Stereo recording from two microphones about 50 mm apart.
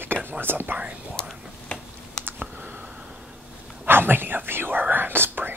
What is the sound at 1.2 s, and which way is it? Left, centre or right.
Whispering, centre.